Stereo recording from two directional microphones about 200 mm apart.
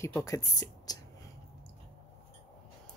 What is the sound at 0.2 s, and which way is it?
Speech, 15° left (ahead or behind).